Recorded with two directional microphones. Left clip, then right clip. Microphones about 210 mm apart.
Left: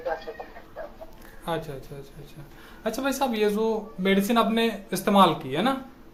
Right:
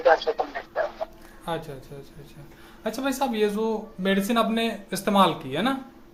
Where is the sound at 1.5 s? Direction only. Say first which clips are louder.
Left 1 dB; centre (ahead or behind).